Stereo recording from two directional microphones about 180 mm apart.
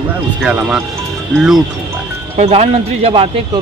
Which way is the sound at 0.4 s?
5° right (ahead or behind).